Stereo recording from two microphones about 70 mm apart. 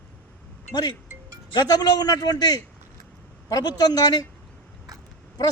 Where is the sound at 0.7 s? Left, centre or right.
Left.